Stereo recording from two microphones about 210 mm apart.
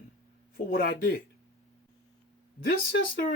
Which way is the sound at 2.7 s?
45° left (ahead or behind).